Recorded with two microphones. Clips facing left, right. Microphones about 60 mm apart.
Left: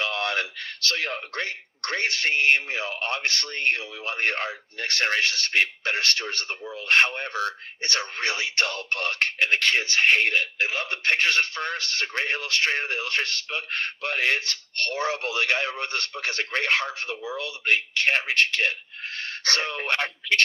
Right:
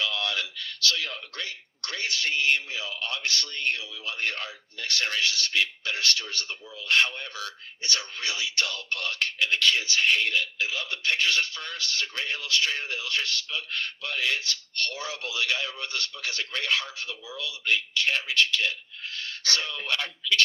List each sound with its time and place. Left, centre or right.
0.0 s speech: left